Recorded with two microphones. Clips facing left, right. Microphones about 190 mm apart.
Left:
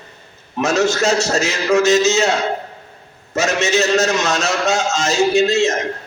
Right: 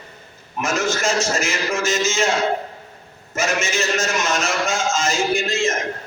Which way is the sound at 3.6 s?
70° left (ahead or behind).